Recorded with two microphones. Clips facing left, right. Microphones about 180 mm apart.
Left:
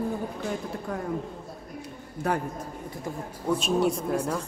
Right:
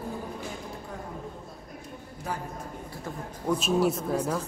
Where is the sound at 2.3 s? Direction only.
65° left (ahead or behind).